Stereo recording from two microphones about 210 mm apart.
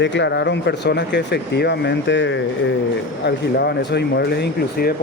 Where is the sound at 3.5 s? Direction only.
50° left (ahead or behind).